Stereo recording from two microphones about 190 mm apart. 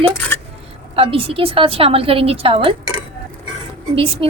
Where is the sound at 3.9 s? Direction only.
30° right (ahead or behind).